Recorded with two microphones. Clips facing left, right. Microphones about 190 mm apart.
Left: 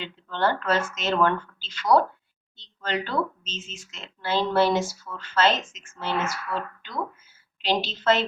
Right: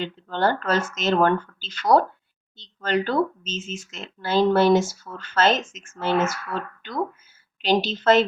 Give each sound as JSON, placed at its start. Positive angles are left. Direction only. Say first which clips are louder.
{"t": 0.0, "sound": "speech", "louder": "right 3 dB", "side_deg": -40}